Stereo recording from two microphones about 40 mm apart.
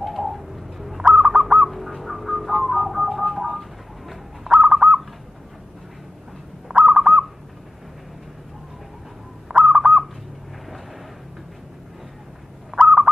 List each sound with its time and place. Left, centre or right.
0.0 s bird: centre
4.6 s bird: centre
6.7 s bird: centre
9.5 s bird: centre
12.7 s fowl: centre